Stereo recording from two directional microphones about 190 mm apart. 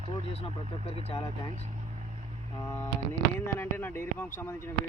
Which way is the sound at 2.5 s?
15° left (ahead or behind).